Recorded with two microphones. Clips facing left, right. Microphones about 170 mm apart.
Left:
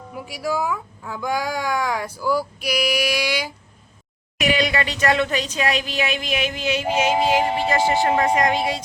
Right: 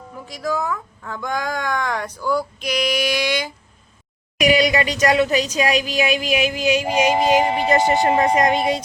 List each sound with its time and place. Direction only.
0.1 s speech: 10° left (ahead or behind)
4.4 s a woman's voice: 10° right (ahead or behind)